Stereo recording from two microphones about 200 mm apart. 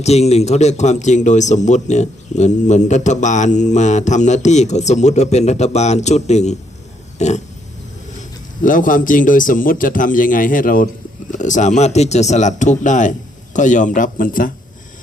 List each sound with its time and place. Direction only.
0.0 s a man's voice: 30° left (ahead or behind)
8.6 s a man's voice: 40° left (ahead or behind)